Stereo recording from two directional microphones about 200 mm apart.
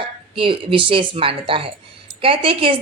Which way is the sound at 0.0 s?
25° right (ahead or behind).